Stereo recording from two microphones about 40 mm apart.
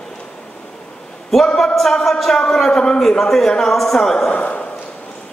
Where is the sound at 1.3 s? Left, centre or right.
Centre.